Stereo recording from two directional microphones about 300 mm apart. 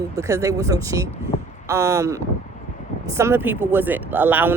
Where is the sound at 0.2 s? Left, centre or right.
Centre.